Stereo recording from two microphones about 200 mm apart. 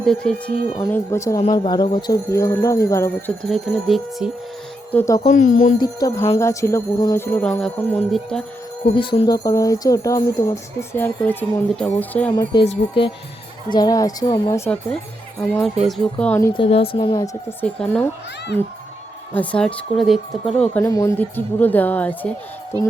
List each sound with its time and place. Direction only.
0.2 s a woman's voice: 5° left (ahead or behind)
4.9 s speech: 10° left (ahead or behind)
5.2 s speech: 40° left (ahead or behind)
5.8 s a woman's voice: 20° left (ahead or behind); by 8.4 s 5° left (ahead or behind)
8.8 s speech: 25° left (ahead or behind); by 12.3 s 5° left (ahead or behind)
12.3 s a woman's voice: 20° left (ahead or behind)
12.6 s a woman's voice: 30° left (ahead or behind); by 16.5 s 5° left (ahead or behind)
16.6 s a woman's voice: 30° left (ahead or behind)
17.7 s a woman's voice: 5° left (ahead or behind)
19.3 s a woman's voice: 5° left (ahead or behind)
20.8 s speech: 15° left (ahead or behind)